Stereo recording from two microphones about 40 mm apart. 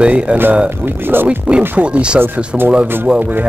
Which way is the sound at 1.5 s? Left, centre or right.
Right.